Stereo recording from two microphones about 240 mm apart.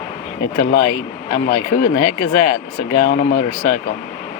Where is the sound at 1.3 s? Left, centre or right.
Left.